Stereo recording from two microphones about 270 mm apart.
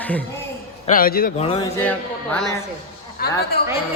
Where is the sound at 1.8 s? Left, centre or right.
Centre.